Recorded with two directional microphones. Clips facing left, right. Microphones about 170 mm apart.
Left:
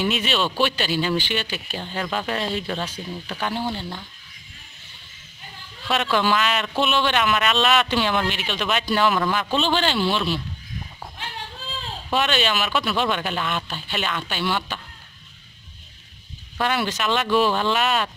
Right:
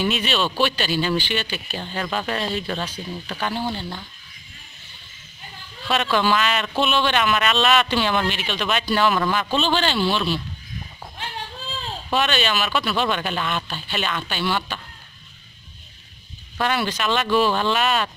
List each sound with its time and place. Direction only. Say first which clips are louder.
0.0 s a man's voice: even; 10° left (ahead or behind)
5.9 s a man's voice: right 1 dB; 5° left (ahead or behind)
12.1 s a man's voice: even; 15° left (ahead or behind)
16.5 s a man's voice: right 1 dB; 5° left (ahead or behind)